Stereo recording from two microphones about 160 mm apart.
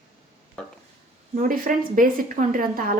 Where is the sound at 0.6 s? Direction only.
5° left (ahead or behind).